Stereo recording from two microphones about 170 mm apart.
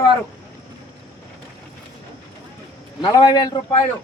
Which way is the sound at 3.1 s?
25° left (ahead or behind).